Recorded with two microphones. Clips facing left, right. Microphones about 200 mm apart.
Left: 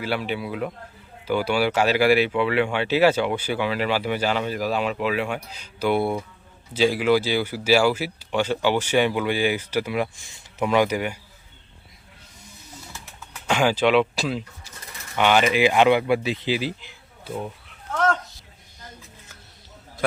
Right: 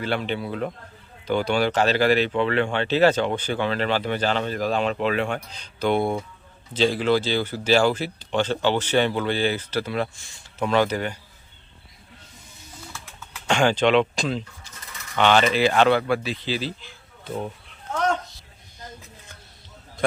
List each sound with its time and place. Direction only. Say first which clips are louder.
0.0 s speech: even; 5° left (ahead or behind)
13.5 s speech: even; 5° left (ahead or behind)